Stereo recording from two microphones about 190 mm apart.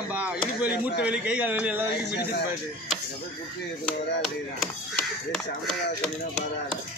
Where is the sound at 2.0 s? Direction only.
60° left (ahead or behind).